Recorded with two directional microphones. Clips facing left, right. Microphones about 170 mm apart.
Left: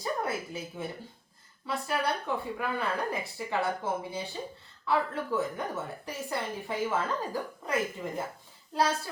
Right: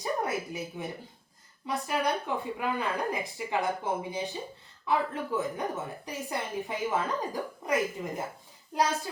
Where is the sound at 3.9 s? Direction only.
15° right (ahead or behind).